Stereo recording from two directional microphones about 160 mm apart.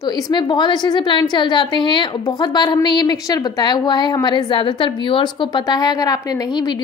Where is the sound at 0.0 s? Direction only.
25° left (ahead or behind).